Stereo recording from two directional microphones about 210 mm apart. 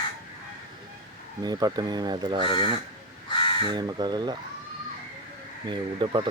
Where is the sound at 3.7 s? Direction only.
20° right (ahead or behind).